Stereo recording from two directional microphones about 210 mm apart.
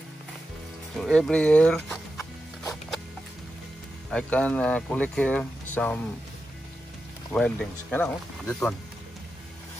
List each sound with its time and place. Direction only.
0.9 s speech: centre (ahead or behind)
4.1 s speech: 5° left (ahead or behind)
7.3 s speech: 5° left (ahead or behind)